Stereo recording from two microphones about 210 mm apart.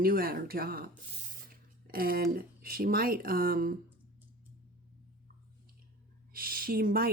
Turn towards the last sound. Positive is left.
turn(degrees=-45)  # may be behind; listen again after turning